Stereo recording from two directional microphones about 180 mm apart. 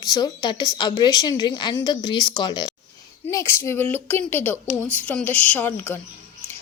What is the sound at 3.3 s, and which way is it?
A woman's voice, 15° left (ahead or behind).